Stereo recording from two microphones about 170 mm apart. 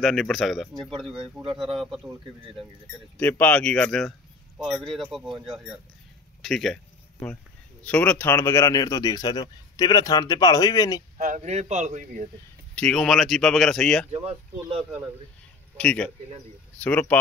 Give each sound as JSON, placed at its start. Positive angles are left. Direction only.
{"t": 0.0, "sound": "speech", "side_deg": 0}
{"t": 3.2, "sound": "speech", "side_deg": 10}
{"t": 7.8, "sound": "speech", "side_deg": 10}
{"t": 11.1, "sound": "speech", "side_deg": -45}
{"t": 12.7, "sound": "speech", "side_deg": 5}
{"t": 14.1, "sound": "speech", "side_deg": -35}
{"t": 14.8, "sound": "speech", "side_deg": -5}
{"t": 15.8, "sound": "speech", "side_deg": 5}